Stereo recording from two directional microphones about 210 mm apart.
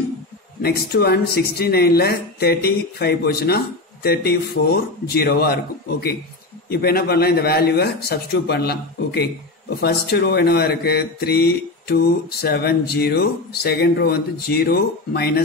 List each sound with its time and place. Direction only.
0.6 s speech: 50° left (ahead or behind)